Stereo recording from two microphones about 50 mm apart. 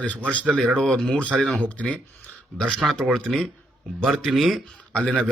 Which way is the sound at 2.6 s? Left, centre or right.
Centre.